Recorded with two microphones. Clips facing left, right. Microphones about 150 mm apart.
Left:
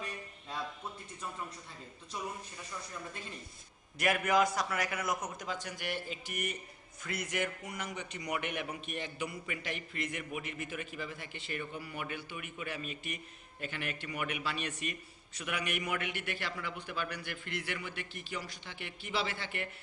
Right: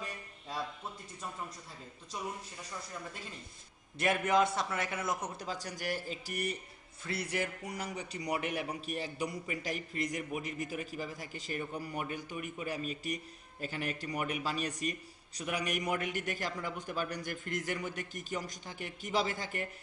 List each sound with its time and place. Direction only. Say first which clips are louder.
4.0 s a man's voice: even; 25° right (ahead or behind)